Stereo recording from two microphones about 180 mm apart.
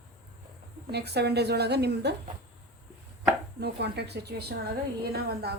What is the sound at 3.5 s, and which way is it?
Speech, 65° right (ahead or behind).